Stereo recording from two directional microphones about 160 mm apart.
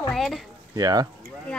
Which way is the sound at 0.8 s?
25° right (ahead or behind).